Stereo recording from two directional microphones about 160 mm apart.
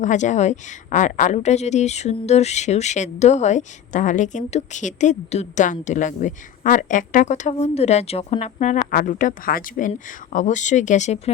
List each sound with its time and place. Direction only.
0.0 s a woman's voice: 50° left (ahead or behind)